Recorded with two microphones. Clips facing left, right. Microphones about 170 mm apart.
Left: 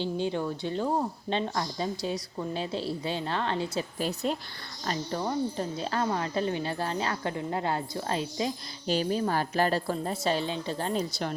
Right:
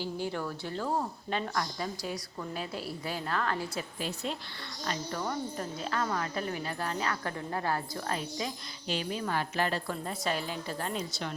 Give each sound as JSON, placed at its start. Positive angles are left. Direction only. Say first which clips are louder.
{"t": 0.0, "sound": "a woman's voice", "louder": "left 5 dB", "side_deg": 20}
{"t": 4.0, "sound": "a woman's voice", "louder": "left 6 dB", "side_deg": 40}
{"t": 5.2, "sound": "a woman's voice", "louder": "left 7 dB", "side_deg": 25}